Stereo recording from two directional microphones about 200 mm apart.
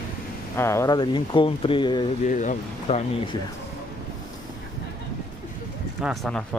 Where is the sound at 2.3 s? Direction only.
40° left (ahead or behind).